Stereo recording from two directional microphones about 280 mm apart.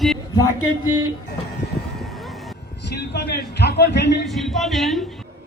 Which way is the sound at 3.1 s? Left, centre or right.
Left.